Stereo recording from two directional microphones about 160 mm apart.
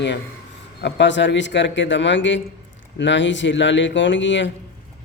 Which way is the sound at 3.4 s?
90° left.